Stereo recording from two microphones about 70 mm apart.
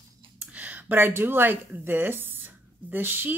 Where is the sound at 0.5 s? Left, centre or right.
Right.